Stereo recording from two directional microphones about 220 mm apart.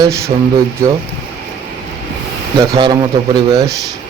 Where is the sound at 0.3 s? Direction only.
25° right (ahead or behind).